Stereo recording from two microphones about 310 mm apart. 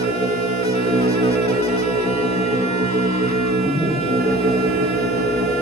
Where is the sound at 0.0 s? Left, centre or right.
Centre.